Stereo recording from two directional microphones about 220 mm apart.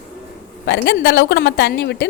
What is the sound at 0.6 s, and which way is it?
A woman's voice, 55° left (ahead or behind).